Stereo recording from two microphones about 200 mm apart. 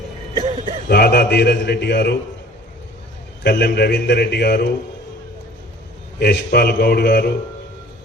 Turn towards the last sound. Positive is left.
turn(degrees=55)  # may be behind; listen again after turning